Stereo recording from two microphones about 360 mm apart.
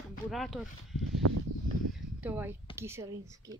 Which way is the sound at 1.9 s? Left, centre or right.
Centre.